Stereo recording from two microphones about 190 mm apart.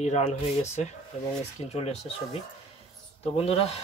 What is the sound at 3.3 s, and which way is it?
Speech, 30° left (ahead or behind).